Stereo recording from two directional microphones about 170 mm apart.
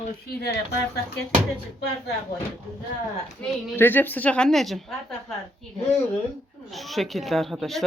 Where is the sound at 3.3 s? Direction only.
10° left (ahead or behind).